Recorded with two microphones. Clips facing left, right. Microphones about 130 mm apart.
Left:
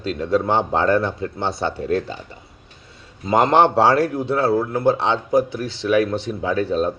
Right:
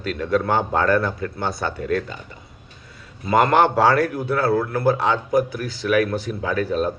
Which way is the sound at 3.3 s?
25° left (ahead or behind).